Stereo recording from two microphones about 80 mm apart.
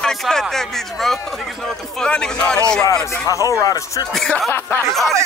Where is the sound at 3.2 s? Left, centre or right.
Left.